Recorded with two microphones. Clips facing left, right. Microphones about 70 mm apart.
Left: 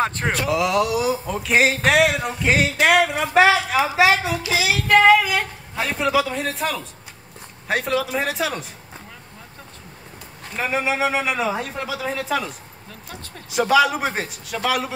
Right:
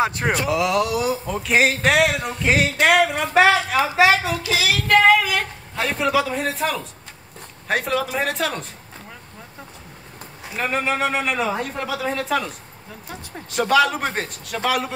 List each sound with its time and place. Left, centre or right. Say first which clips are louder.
0.0 s a man's voice: right 1 dB; centre
4.5 s child singing: left 1 dB; centre
4.8 s a sound: left 1 dB; centre
7.6 s a man's voice: even; centre
10.4 s a man's voice: even; centre